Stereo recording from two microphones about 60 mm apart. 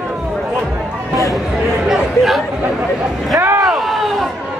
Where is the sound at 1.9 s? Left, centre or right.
Centre.